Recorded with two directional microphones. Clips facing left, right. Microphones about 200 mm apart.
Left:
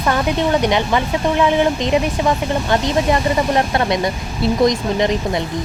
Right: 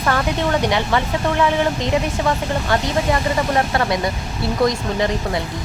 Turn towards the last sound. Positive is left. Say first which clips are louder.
# left 3 dB
turn(degrees=20)  # may be behind; listen again after turning